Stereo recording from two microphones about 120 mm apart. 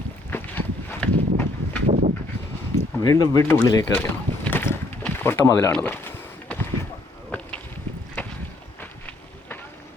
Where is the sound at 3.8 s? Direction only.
15° left (ahead or behind).